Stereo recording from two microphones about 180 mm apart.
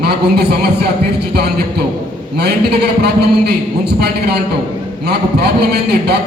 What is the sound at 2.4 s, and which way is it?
A man's voice, 65° right (ahead or behind).